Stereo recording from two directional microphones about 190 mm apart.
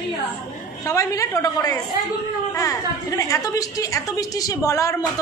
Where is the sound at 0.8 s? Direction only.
15° left (ahead or behind).